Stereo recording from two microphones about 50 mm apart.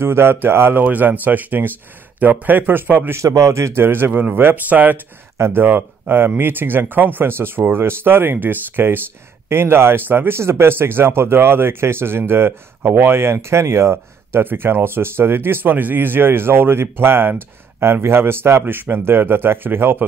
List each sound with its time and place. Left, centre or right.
0.0 s speech: right
0.7 s speech: right
3.2 s speech: right
3.8 s speech: right
5.4 s speech: right
9.5 s speech: right
14.5 s speech: right